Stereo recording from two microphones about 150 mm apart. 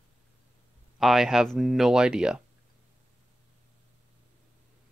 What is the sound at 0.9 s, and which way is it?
Speech, centre (ahead or behind).